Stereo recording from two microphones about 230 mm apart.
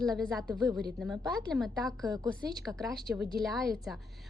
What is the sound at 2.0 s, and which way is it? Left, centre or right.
Speech, centre.